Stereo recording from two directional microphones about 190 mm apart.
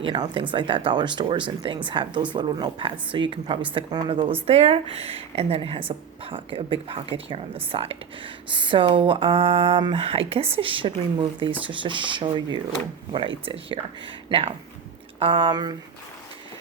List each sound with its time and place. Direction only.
0.0 s a woman's voice: 25° right (ahead or behind)